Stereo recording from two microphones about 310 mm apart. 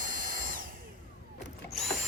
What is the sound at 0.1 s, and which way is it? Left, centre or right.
Drill, right.